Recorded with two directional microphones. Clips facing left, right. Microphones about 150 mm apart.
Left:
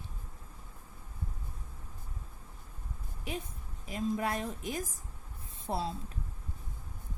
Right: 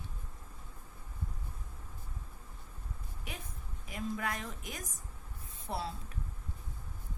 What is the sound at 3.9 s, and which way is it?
A woman's voice, 25° left (ahead or behind).